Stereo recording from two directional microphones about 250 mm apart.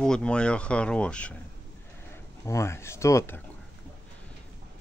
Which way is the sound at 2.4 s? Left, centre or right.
Centre.